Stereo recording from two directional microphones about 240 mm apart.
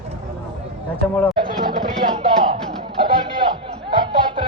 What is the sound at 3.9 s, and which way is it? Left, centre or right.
Music, centre.